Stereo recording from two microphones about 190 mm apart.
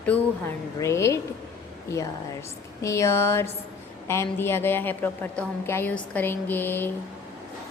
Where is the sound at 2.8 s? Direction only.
15° left (ahead or behind).